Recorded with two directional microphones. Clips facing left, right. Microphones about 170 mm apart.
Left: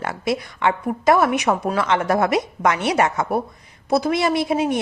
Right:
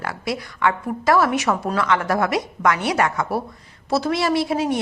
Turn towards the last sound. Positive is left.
turn(degrees=20)  # may be behind; listen again after turning